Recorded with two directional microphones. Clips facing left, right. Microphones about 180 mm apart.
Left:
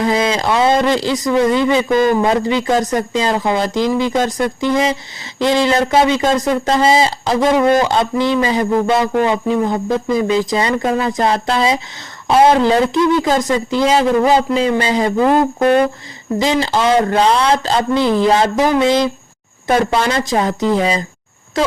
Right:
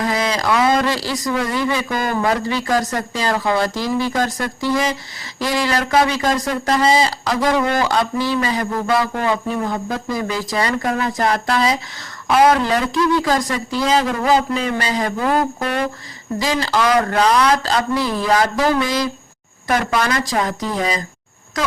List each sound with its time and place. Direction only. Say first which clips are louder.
0.0 s speech: left 4 dB; 25° left (ahead or behind)